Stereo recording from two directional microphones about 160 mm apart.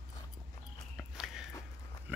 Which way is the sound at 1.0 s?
Centre (ahead or behind).